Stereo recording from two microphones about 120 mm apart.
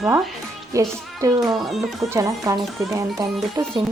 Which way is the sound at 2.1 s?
25° right (ahead or behind).